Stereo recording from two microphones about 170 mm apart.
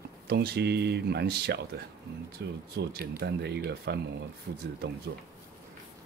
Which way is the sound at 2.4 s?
85° right.